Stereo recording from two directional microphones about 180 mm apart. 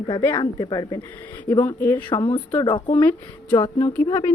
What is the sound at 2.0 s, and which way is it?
A woman's voice, 25° left (ahead or behind).